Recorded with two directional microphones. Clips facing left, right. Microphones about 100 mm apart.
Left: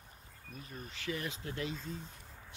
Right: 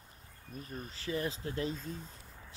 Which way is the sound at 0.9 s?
35° right (ahead or behind).